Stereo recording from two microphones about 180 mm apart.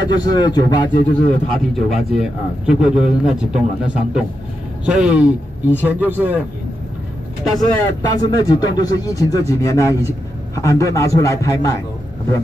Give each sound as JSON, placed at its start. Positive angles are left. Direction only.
{"t": 0.0, "sound": "speech", "side_deg": 25}
{"t": 1.5, "sound": "a man's voice", "side_deg": 0}
{"t": 7.4, "sound": "a man's voice", "side_deg": 0}
{"t": 8.2, "sound": "a man's voice", "side_deg": 25}